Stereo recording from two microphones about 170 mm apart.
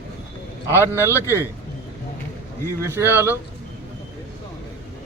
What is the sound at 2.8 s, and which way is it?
Speech, 15° right (ahead or behind).